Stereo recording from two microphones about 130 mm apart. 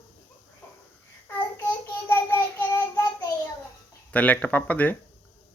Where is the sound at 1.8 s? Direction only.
15° left (ahead or behind).